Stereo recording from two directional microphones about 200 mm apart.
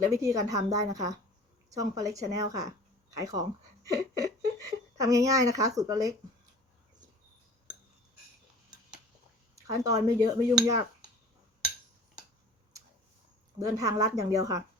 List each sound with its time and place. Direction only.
0.0 s a woman's voice: 15° right (ahead or behind)
9.6 s speech: 20° right (ahead or behind)
13.6 s a woman's voice: 15° right (ahead or behind)